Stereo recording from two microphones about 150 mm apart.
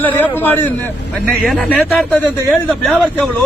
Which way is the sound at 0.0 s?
10° left (ahead or behind).